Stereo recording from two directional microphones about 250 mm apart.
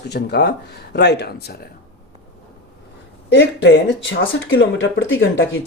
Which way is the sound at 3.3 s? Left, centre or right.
Left.